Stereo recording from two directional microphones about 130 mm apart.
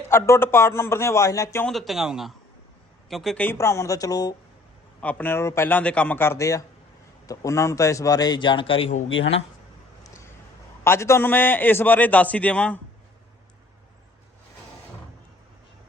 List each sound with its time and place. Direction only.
0.1 s a man's voice: 20° left (ahead or behind)
1.6 s a man's voice: centre (ahead or behind)
3.4 s a man's voice: 20° left (ahead or behind)
4.9 s a man's voice: 10° left (ahead or behind); by 8.9 s 45° left (ahead or behind)
10.8 s a man's voice: 20° left (ahead or behind)